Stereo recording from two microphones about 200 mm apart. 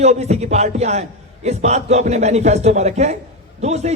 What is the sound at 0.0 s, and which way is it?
A man's voice, 35° right (ahead or behind).